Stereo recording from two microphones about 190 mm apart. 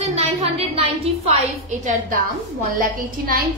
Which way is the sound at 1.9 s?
45° right (ahead or behind).